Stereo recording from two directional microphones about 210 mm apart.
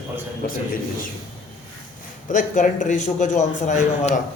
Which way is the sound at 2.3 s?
35° left (ahead or behind).